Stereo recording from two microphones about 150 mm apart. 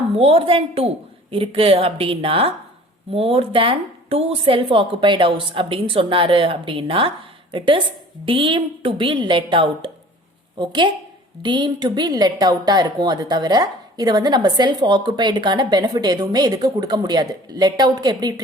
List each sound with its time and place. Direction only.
0.2 s a woman's voice: 40° right (ahead or behind)
8.2 s a woman's voice: 35° right (ahead or behind)
11.4 s a woman's voice: 30° right (ahead or behind)